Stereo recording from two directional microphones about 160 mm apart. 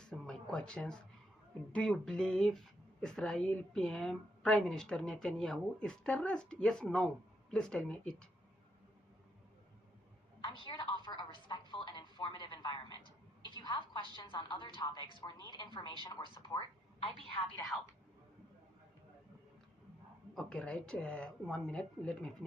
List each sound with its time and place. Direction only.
0.0 s a sound: 5° left (ahead or behind)
1.7 s speech: 5° left (ahead or behind)
10.4 s a sound: 30° left (ahead or behind)
14.2 s a woman's voice: 30° left (ahead or behind)
17.7 s speech: centre (ahead or behind)
20.3 s speech: 5° left (ahead or behind)